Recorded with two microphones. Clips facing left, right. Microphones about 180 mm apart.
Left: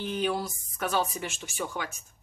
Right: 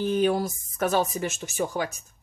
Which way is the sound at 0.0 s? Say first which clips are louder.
Right 7 dB; 45° right (ahead or behind).